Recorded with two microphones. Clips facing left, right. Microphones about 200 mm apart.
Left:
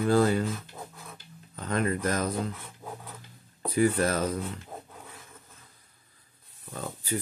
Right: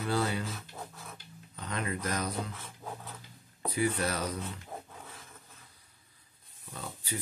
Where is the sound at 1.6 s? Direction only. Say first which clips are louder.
Left 7 dB; 50° left (ahead or behind).